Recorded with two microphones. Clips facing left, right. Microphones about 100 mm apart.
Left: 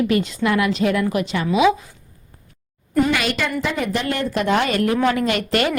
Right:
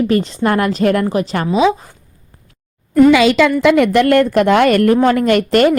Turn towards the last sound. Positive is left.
turn(degrees=-45)  # may be behind; listen again after turning